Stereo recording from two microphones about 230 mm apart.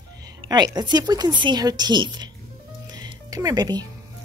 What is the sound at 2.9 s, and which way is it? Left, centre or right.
Music, centre.